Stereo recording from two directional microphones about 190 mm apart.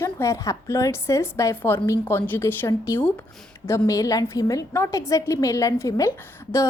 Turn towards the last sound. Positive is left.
turn(degrees=15)  # may be behind; listen again after turning